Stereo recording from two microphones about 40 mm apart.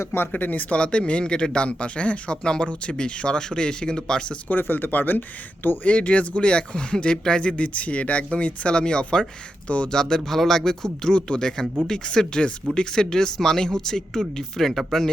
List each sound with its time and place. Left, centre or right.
0.3 s speech: left
0.8 s speech: left
4.4 s speech: left
5.8 s speech: left
9.9 s speech: centre